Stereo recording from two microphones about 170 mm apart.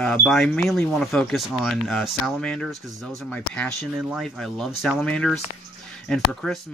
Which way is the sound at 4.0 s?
5° right (ahead or behind).